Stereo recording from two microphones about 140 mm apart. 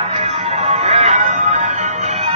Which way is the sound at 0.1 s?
50° right (ahead or behind).